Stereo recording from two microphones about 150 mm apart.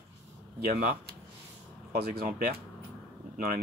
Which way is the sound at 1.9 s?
85° right.